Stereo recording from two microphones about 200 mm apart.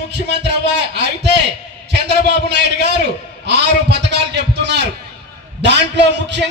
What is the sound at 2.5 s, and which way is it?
A man's voice, 60° right (ahead or behind).